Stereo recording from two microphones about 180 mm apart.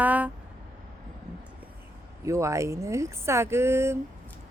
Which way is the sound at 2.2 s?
15° right (ahead or behind).